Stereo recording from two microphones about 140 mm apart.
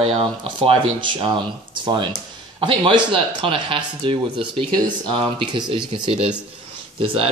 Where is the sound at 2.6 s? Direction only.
35° right (ahead or behind).